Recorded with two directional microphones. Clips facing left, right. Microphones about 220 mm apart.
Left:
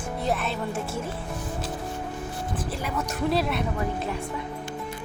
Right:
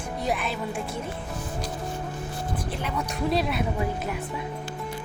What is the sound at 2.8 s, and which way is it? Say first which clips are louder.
Speech: left 1 dB; centre (ahead or behind).